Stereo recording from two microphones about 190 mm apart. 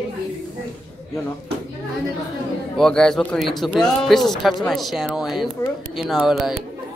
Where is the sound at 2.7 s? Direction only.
5° left (ahead or behind).